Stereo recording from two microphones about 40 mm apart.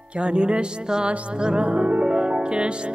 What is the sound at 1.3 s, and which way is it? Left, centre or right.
Music, right.